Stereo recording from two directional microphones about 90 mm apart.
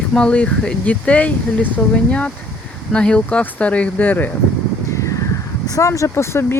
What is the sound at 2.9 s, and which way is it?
Speech, 10° left (ahead or behind).